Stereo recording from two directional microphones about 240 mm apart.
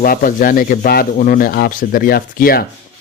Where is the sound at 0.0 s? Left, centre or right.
Left.